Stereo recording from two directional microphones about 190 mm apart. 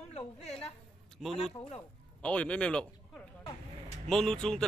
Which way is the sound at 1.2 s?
Centre (ahead or behind).